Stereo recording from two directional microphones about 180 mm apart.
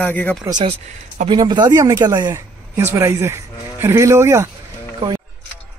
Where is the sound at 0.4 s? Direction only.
25° right (ahead or behind).